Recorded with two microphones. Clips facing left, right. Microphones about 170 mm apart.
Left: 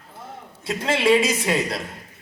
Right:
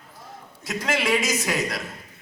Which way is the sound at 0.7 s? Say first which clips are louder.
Left 5 dB; 30° left (ahead or behind).